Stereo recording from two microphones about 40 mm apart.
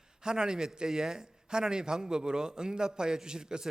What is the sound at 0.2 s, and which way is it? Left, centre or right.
A man's voice, centre.